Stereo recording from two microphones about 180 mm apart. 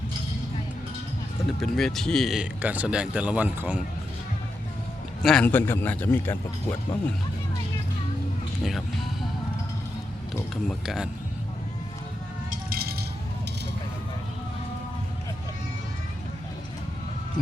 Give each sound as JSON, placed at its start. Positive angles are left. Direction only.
{"t": 1.6, "sound": "speech", "side_deg": 0}
{"t": 5.2, "sound": "a man's voice", "side_deg": 5}
{"t": 10.5, "sound": "speech", "side_deg": 0}
{"t": 12.5, "sound": "rattle", "side_deg": -55}